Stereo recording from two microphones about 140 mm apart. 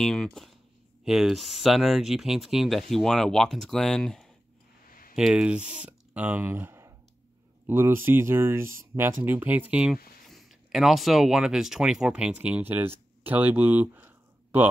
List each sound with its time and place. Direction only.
0.0 s speech: 5° left (ahead or behind)
4.8 s a sound: 90° left
5.1 s speech: 5° right (ahead or behind)